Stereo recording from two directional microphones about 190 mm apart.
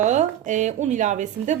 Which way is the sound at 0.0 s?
40° right (ahead or behind).